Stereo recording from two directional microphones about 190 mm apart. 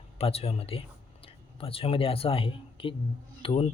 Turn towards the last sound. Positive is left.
turn(degrees=30)  # may be behind; listen again after turning